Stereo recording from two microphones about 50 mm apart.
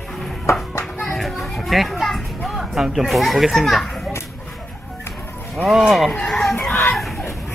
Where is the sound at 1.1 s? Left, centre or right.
Centre.